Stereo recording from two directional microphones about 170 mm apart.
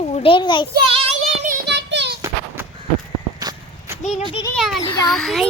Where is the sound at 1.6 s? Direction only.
90° right.